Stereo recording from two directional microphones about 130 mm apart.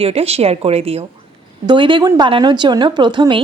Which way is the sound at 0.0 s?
50° right (ahead or behind).